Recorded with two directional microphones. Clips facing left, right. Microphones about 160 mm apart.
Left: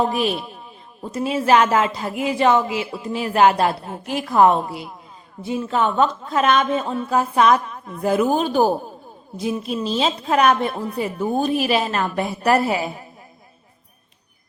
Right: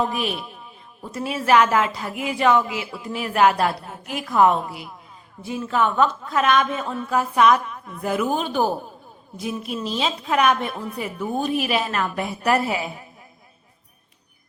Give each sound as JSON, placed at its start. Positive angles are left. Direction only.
{"t": 0.0, "sound": "a woman's voice", "side_deg": 30}
{"t": 9.4, "sound": "a woman's voice", "side_deg": 25}